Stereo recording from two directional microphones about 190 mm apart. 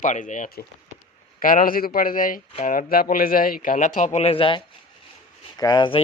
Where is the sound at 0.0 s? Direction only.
40° left (ahead or behind).